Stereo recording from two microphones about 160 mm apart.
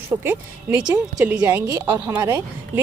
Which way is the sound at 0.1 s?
15° right (ahead or behind).